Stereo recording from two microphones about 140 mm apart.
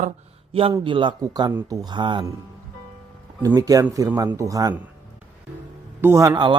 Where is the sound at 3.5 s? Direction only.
25° right (ahead or behind).